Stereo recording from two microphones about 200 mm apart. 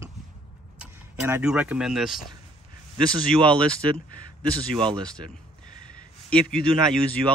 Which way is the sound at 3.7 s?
25° right (ahead or behind).